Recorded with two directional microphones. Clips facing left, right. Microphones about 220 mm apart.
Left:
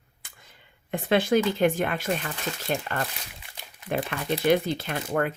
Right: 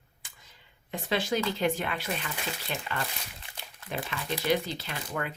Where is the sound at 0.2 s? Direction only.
55° left (ahead or behind).